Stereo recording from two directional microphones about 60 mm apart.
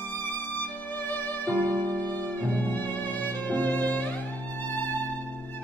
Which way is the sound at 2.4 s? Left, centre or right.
Left.